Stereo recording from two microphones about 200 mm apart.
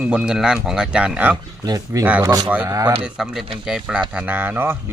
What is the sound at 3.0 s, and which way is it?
Speech, centre (ahead or behind).